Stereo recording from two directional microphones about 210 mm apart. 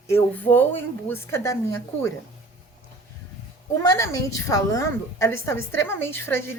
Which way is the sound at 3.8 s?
15° left (ahead or behind).